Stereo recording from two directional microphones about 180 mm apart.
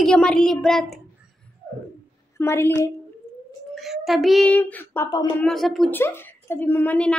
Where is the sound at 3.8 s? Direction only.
Centre (ahead or behind).